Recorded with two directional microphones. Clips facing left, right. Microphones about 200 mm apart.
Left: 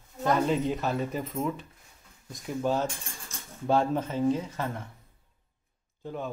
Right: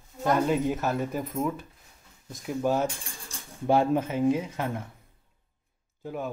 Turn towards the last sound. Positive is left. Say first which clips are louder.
# right 2 dB
turn(degrees=-10)  # may be behind; listen again after turning